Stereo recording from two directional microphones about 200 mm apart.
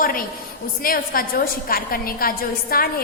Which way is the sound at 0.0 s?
45° left (ahead or behind).